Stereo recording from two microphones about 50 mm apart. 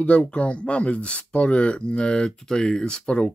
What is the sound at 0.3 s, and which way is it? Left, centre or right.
Speech, left.